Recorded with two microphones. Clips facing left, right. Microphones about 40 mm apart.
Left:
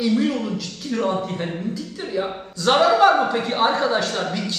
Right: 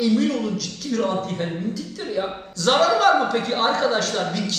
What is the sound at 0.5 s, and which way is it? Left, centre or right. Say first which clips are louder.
Speech: right 1 dB; left.